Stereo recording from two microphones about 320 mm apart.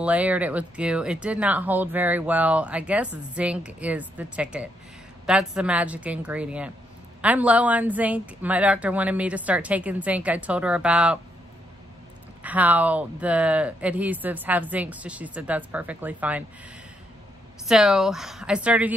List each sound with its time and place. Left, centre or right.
0.0 s speech: centre
12.4 s speech: centre
17.6 s speech: centre